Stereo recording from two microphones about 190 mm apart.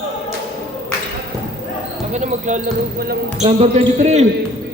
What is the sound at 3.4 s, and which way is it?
Speech, 35° right (ahead or behind).